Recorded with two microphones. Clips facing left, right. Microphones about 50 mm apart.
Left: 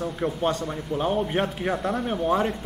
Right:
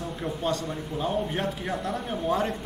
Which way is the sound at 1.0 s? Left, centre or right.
Left.